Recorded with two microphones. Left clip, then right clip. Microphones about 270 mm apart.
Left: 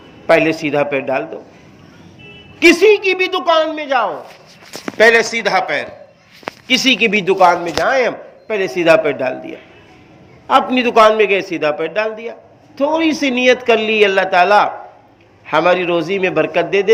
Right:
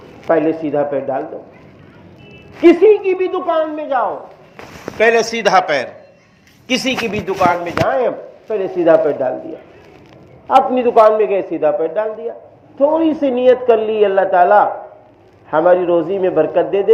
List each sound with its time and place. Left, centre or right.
0.3 s speech: left
2.6 s speech: left
4.9 s a man's voice: centre
5.3 s a man's voice: centre
7.3 s speech: left
10.4 s speech: left